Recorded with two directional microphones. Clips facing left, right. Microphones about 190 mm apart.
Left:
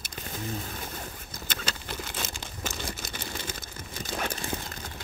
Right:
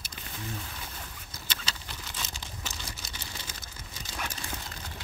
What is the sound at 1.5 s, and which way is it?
Crumpling, 50° left (ahead or behind).